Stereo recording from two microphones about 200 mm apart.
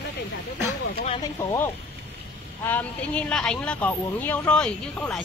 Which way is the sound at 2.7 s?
10° left (ahead or behind).